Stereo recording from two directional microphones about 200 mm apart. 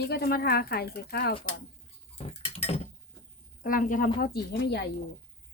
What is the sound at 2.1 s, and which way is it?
Patter, 30° left (ahead or behind).